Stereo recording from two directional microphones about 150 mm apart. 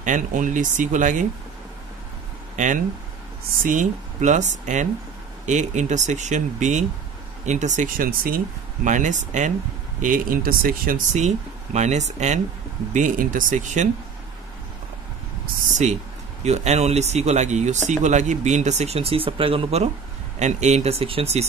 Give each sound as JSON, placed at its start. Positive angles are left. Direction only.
{"t": 0.0, "sound": "speech", "side_deg": -60}
{"t": 2.5, "sound": "speech", "side_deg": -55}
{"t": 8.8, "sound": "speech", "side_deg": -55}
{"t": 10.0, "sound": "speech", "side_deg": -70}
{"t": 12.9, "sound": "speech", "side_deg": -60}
{"t": 16.4, "sound": "speech", "side_deg": -45}